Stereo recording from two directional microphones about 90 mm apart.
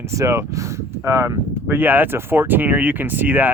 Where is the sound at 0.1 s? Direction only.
35° right (ahead or behind).